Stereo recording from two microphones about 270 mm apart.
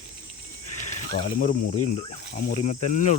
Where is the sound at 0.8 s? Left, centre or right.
Left.